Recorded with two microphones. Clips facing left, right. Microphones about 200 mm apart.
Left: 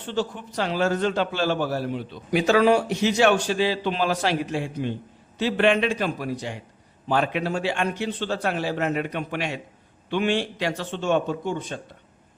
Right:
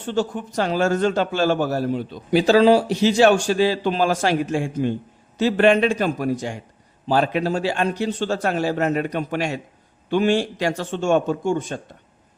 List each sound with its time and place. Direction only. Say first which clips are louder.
0.0 s a man's voice: right 4 dB; 50° right (ahead or behind); by 3.3 s 30° right (ahead or behind)
3.3 s a man's voice: right 4 dB; 45° right (ahead or behind)